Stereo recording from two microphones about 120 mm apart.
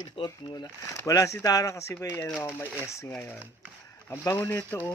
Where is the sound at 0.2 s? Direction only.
40° left (ahead or behind).